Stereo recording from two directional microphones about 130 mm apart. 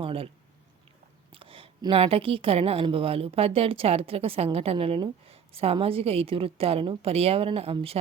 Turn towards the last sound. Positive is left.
turn(degrees=-50)  # may be behind; listen again after turning